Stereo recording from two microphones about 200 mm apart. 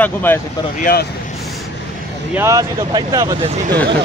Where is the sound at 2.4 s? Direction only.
15° right (ahead or behind).